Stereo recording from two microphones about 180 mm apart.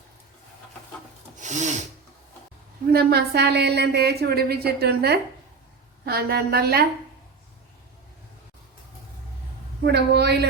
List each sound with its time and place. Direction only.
1.4 s filing: 40° right (ahead or behind)
2.9 s a woman's voice: 65° right (ahead or behind)
9.8 s a woman's voice: 65° right (ahead or behind)